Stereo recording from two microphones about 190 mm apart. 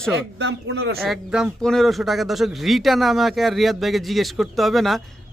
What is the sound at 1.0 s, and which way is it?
A man's voice, centre (ahead or behind).